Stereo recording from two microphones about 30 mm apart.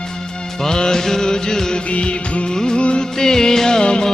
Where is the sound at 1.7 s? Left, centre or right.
Left.